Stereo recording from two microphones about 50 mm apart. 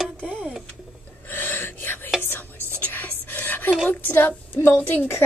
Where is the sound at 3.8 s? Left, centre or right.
Left.